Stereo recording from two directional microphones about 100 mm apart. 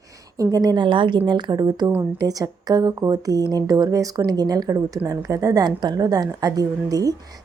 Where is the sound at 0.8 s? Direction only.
55° right (ahead or behind); by 7.4 s 40° right (ahead or behind).